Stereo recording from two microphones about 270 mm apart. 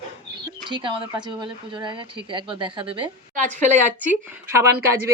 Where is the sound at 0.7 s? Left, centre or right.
Centre.